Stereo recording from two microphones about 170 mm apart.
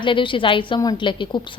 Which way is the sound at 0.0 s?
30° left (ahead or behind).